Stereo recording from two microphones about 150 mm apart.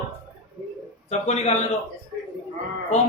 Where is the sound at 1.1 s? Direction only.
45° left (ahead or behind).